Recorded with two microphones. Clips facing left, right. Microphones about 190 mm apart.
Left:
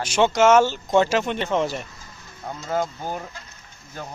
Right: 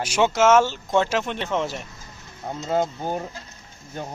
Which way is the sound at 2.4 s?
20° right (ahead or behind).